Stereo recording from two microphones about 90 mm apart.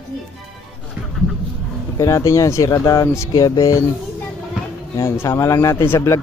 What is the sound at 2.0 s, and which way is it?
Speech, 35° left (ahead or behind).